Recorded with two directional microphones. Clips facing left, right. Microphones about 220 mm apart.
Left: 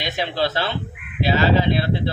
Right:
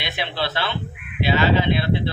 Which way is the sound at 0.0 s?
40° left (ahead or behind).